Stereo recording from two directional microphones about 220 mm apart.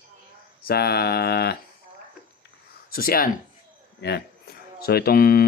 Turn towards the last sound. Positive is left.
turn(degrees=45)  # may be behind; listen again after turning